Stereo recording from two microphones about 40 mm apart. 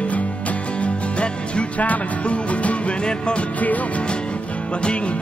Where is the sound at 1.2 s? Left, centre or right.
Left.